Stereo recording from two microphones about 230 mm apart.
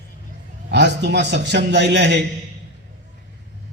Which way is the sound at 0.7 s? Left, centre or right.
Right.